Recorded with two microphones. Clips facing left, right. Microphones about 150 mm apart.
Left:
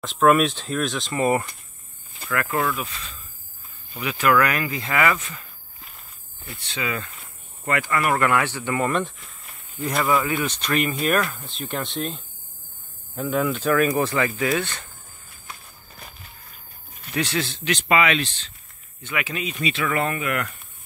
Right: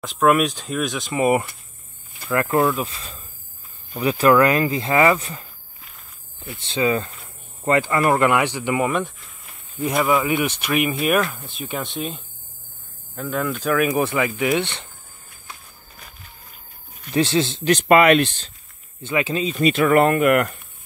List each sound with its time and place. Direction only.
0.0 s speech: centre (ahead or behind)
1.0 s speech: 15° right (ahead or behind)
2.3 s speech: 25° right (ahead or behind)
6.6 s speech: 30° right (ahead or behind); by 13.9 s 5° right (ahead or behind)
13.9 s speech: 15° right (ahead or behind)
17.1 s speech: 25° right (ahead or behind)
17.6 s speech: 50° right (ahead or behind)
19.0 s speech: 30° right (ahead or behind)
19.6 s speech: 45° right (ahead or behind)